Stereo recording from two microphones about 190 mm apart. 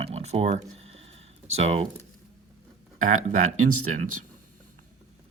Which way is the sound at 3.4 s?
90° right.